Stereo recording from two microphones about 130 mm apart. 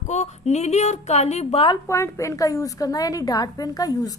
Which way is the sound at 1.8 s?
20° left (ahead or behind).